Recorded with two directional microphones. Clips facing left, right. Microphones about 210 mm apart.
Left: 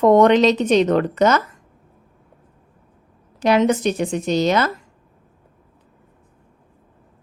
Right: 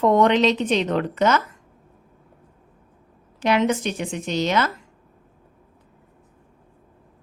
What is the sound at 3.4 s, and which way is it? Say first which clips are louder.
A woman's voice: left 4 dB; 40° left (ahead or behind).